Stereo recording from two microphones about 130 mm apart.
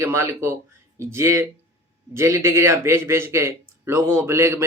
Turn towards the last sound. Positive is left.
turn(degrees=-20)  # may be behind; listen again after turning